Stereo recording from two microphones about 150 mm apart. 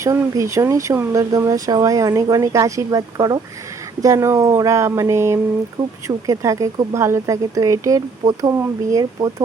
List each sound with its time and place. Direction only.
0.0 s speech: 20° right (ahead or behind)